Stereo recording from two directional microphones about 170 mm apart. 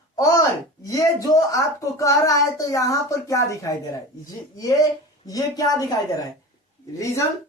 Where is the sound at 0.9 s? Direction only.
20° left (ahead or behind).